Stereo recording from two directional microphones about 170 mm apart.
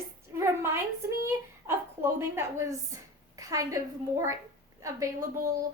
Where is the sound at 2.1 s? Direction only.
15° right (ahead or behind).